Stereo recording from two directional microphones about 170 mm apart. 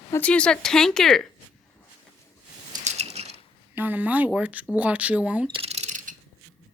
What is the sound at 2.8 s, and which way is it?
Pulleys, 40° right (ahead or behind).